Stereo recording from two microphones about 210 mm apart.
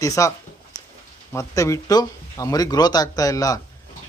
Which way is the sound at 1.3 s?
15° left (ahead or behind).